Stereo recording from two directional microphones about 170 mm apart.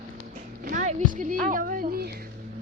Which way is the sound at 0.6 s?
50° right (ahead or behind).